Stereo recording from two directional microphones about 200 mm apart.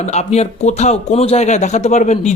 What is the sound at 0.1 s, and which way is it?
Speech, 35° left (ahead or behind).